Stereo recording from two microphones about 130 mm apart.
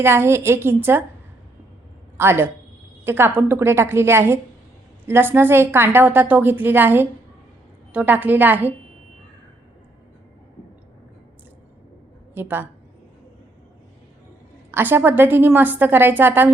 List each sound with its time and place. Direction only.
0.0 s a woman's voice: 20° right (ahead or behind)
2.1 s a woman's voice: 20° right (ahead or behind)
12.3 s a woman's voice: 15° right (ahead or behind)
14.7 s a woman's voice: 15° right (ahead or behind)